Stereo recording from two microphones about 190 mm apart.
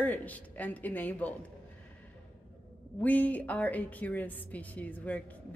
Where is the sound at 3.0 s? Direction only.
10° left (ahead or behind).